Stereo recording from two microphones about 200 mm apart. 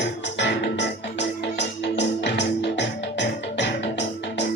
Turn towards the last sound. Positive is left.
turn(degrees=60)  # may be behind; listen again after turning